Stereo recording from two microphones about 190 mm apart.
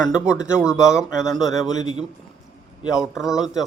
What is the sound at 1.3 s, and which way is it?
Speech, centre (ahead or behind).